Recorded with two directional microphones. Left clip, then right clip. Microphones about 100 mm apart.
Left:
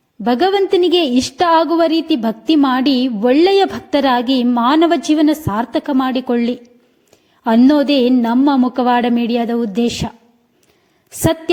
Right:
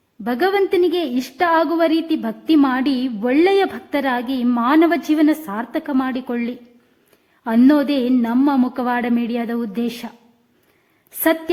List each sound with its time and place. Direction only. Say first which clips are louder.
0.3 s a woman's voice: left 4 dB; 25° left (ahead or behind)
7.7 s a woman's voice: left 4 dB; 25° left (ahead or behind)
11.2 s a woman's voice: left 2 dB; 25° left (ahead or behind)